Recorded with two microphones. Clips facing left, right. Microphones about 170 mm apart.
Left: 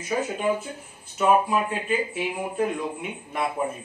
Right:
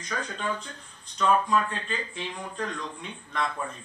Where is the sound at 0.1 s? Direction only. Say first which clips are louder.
Left 7 dB; 10° left (ahead or behind).